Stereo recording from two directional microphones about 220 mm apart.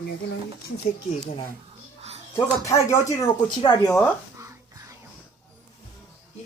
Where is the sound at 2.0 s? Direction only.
30° right (ahead or behind).